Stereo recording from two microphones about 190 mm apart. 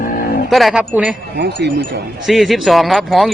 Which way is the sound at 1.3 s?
65° right (ahead or behind).